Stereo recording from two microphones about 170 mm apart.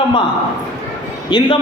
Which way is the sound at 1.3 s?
30° left (ahead or behind).